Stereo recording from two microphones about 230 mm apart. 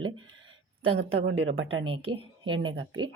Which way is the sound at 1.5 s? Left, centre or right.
Right.